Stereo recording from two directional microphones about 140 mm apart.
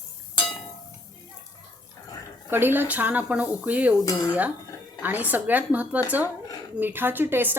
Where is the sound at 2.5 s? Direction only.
15° right (ahead or behind).